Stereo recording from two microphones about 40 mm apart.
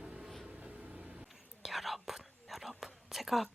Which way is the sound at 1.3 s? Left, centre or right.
Centre.